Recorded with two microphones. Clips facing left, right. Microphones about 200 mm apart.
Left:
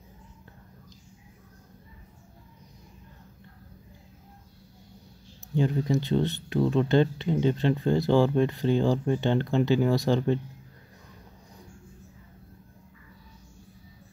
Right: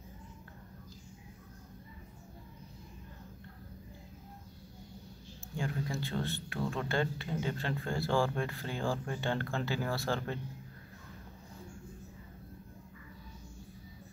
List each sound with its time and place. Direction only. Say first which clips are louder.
5.6 s speech: left 11 dB; 20° left (ahead or behind)